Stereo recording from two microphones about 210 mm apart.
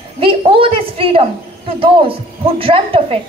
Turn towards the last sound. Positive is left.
turn(degrees=-25)  # may be behind; listen again after turning